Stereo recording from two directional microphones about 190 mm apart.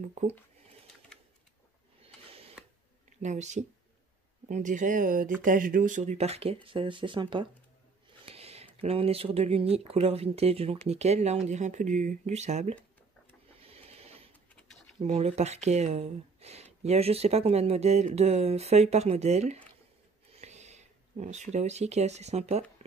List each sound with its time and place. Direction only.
0.0 s speech: 40° right (ahead or behind)
1.1 s a sound: 5° left (ahead or behind)
2.6 s a sound: 5° right (ahead or behind)
3.2 s speech: 40° right (ahead or behind)
13.6 s printer: 30° right (ahead or behind)
15.0 s speech: 35° right (ahead or behind)